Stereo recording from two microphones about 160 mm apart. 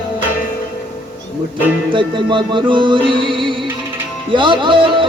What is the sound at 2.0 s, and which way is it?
Music, 30° right (ahead or behind).